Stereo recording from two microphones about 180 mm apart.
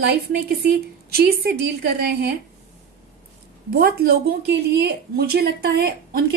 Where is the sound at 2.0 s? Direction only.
65° right (ahead or behind).